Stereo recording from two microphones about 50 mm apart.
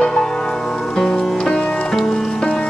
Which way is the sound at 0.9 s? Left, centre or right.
Centre.